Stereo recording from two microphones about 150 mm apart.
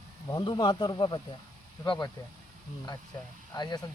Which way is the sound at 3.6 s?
30° left (ahead or behind).